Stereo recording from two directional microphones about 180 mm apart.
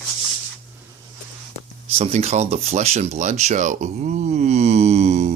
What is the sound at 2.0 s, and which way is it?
Speech, 35° right (ahead or behind).